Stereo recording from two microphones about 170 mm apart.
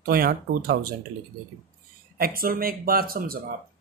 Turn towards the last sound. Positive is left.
turn(degrees=-60)  # may be behind; listen again after turning